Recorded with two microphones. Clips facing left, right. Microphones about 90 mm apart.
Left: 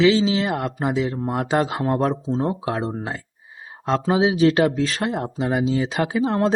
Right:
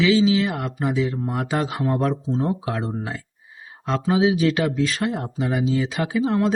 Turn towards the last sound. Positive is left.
turn(degrees=35)  # may be behind; listen again after turning